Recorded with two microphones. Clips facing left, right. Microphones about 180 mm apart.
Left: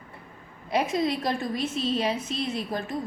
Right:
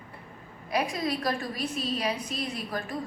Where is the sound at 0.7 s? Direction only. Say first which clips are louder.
Left 4 dB; 25° left (ahead or behind).